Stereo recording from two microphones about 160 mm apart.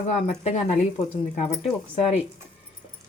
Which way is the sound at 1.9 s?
35° left (ahead or behind).